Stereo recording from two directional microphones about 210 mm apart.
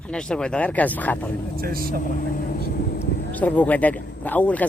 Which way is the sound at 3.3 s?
5° left (ahead or behind).